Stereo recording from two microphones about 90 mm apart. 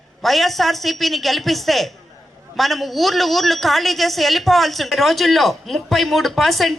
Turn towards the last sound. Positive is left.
turn(degrees=0)  # may be behind; listen again after turning